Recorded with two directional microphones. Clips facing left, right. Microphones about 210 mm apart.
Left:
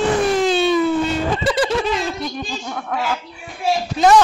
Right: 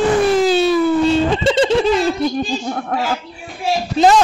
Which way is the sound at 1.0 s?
25° right (ahead or behind).